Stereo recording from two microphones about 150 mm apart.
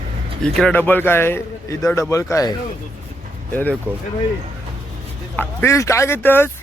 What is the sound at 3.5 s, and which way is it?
Speech, 10° left (ahead or behind).